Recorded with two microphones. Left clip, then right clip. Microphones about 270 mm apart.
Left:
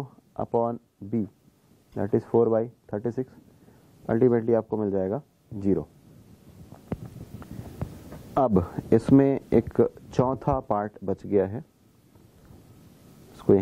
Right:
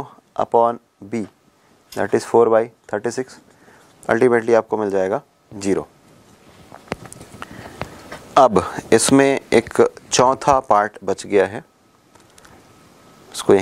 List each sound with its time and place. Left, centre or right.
0.5 s speech: centre
6.7 s a sound: centre
10.7 s speech: centre
13.3 s speech: centre